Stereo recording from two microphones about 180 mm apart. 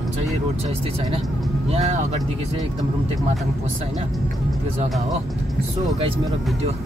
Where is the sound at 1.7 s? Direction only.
40° right (ahead or behind).